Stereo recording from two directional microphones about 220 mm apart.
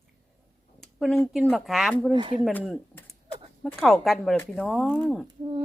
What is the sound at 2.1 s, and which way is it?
Speech, 20° right (ahead or behind).